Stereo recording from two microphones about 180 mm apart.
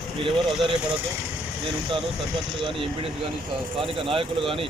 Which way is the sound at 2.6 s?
30° right (ahead or behind).